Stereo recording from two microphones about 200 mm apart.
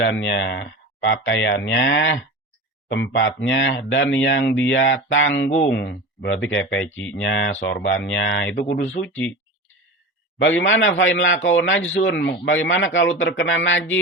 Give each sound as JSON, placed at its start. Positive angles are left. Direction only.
{"t": 0.1, "sound": "a man's voice", "side_deg": 65}
{"t": 10.3, "sound": "a man's voice", "side_deg": 70}